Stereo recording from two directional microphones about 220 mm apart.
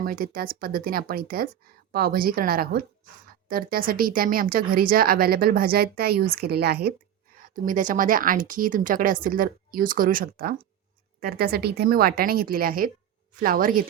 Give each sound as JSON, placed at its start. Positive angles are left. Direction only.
{"t": 0.0, "sound": "a woman's voice", "side_deg": -40}